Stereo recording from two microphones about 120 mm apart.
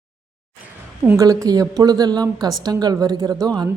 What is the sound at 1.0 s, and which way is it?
A woman's voice, 25° right (ahead or behind).